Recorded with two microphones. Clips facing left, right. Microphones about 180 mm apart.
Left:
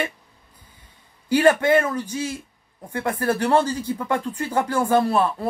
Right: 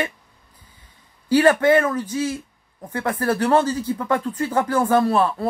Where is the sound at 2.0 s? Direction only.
10° left (ahead or behind).